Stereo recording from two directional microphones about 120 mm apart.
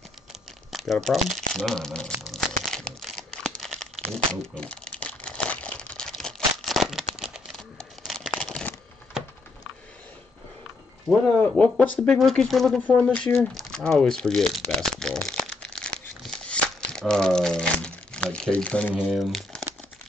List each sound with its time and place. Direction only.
0.3 s a sound: centre (ahead or behind)
0.9 s speech: centre (ahead or behind)
2.3 s crumpling: 5° left (ahead or behind)
8.4 s a sound: 5° left (ahead or behind)
11.1 s speech: 5° left (ahead or behind)
14.5 s crumpling: 5° left (ahead or behind)
18.9 s speech: centre (ahead or behind)